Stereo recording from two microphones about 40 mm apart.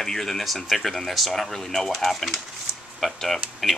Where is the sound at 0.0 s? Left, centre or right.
Centre.